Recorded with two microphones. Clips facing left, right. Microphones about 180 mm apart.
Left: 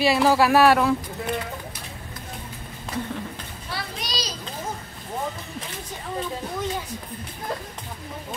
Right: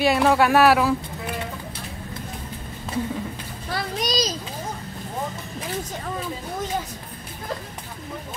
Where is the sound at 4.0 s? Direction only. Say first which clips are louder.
Right 12 dB; 45° right (ahead or behind).